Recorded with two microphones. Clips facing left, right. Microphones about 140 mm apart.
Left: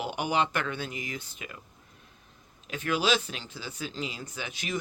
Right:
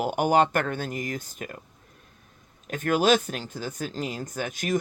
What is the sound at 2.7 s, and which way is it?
Speech, 50° right (ahead or behind).